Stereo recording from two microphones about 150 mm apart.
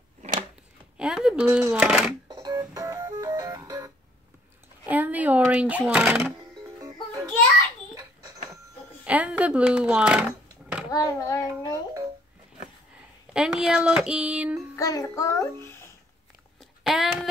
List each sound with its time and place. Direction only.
0.9 s speech: 5° right (ahead or behind)
2.2 s music: 25° right (ahead or behind)
4.8 s speech: 10° right (ahead or behind)
6.8 s music: 25° right (ahead or behind)
9.0 s speech: 10° right (ahead or behind)
10.9 s child singing: 20° left (ahead or behind)
13.3 s speech: 5° right (ahead or behind)
14.8 s child singing: 20° left (ahead or behind)
16.8 s a sound: centre (ahead or behind)